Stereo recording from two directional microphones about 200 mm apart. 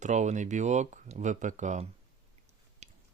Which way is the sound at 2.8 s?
35° right (ahead or behind).